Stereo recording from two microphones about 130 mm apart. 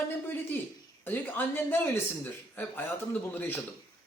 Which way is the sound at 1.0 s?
15° left (ahead or behind).